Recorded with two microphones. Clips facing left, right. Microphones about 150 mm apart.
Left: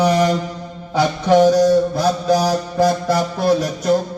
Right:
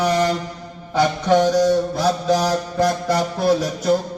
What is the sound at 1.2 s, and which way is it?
Mantra, 5° left (ahead or behind).